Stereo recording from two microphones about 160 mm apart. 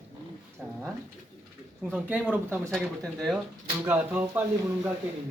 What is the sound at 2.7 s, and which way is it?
Speech, centre (ahead or behind).